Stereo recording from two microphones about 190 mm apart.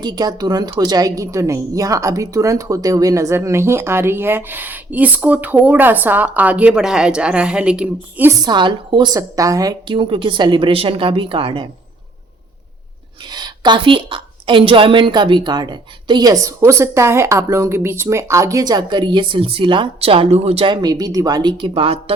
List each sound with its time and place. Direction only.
0.0 s a woman's voice: 20° right (ahead or behind)
8.4 s a woman's voice: 25° right (ahead or behind)
13.3 s a woman's voice: 20° right (ahead or behind)